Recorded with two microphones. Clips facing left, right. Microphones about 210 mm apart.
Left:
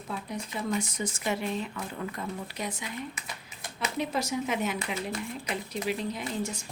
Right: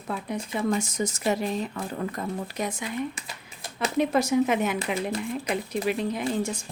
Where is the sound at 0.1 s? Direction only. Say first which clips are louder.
Right 5 dB; 50° right (ahead or behind).